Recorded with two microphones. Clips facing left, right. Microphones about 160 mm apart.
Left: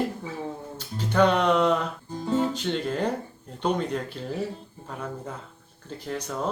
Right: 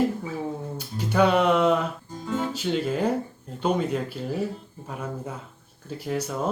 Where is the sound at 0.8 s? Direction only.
10° right (ahead or behind).